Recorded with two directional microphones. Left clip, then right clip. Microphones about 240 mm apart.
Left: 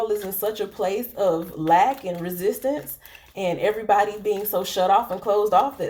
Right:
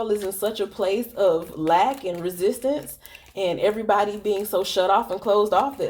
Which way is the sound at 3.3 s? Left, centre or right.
Right.